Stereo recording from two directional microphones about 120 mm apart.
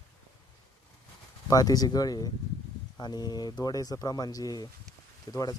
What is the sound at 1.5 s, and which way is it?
Speech, 30° left (ahead or behind).